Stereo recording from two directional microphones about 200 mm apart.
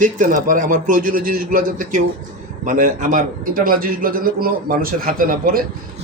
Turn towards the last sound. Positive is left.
turn(degrees=-45)  # may be behind; listen again after turning